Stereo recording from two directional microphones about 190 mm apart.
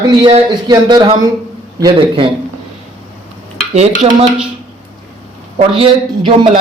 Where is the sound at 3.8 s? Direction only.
35° right (ahead or behind).